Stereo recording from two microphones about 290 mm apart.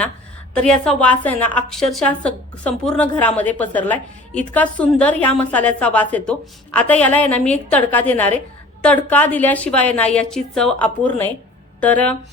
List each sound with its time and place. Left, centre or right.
0.5 s a woman's voice: centre